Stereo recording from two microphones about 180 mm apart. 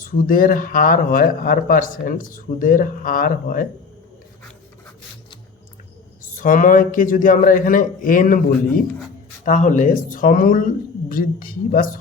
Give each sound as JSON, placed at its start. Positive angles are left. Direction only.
{"t": 0.0, "sound": "speech", "side_deg": 50}
{"t": 6.4, "sound": "speech", "side_deg": 50}